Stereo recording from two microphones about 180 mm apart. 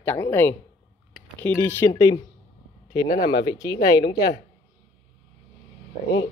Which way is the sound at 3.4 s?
20° left (ahead or behind).